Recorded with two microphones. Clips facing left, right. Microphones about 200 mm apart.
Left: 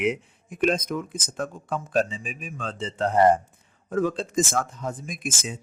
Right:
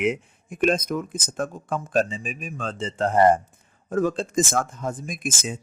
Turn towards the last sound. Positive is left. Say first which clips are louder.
# right 2 dB
turn(degrees=-50)  # may be behind; listen again after turning